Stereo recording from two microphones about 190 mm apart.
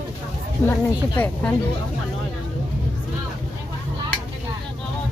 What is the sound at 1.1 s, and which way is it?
Speech, 10° left (ahead or behind).